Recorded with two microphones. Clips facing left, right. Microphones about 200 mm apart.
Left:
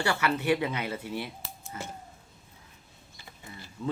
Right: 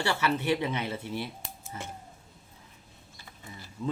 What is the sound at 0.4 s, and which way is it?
Speech, 25° right (ahead or behind).